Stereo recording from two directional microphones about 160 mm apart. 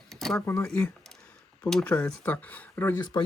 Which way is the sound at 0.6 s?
5° left (ahead or behind).